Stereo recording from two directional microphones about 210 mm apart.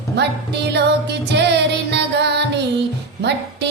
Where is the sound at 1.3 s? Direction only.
55° right (ahead or behind).